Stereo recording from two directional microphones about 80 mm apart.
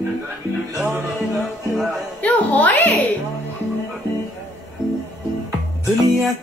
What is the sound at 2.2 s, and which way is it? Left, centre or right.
Music, left.